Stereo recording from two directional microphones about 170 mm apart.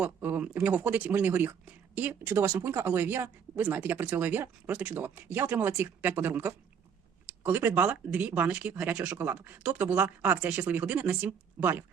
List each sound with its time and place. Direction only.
0.0 s speech: 10° right (ahead or behind)